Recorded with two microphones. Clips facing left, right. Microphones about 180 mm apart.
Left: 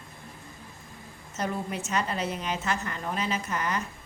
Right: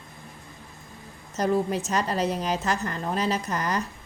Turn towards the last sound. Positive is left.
turn(degrees=-35)  # may be behind; listen again after turning